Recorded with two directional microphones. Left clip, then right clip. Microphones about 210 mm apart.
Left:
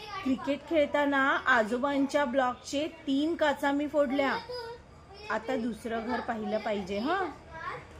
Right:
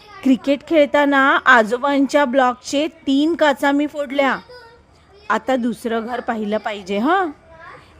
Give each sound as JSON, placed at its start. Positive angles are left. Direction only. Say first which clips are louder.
{"t": 0.3, "sound": "a woman's voice", "louder": "right 15 dB", "side_deg": -55}